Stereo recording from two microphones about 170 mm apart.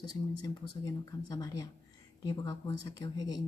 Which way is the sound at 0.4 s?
20° left (ahead or behind).